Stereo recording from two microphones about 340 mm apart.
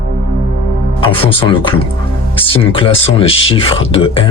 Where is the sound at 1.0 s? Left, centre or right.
Centre.